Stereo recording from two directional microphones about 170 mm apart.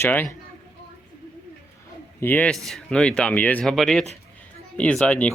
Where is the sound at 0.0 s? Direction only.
15° left (ahead or behind).